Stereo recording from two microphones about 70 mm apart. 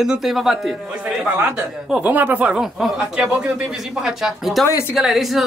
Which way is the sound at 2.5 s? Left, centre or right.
Centre.